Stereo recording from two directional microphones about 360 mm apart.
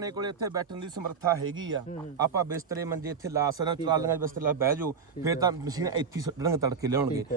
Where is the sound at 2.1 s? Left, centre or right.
Centre.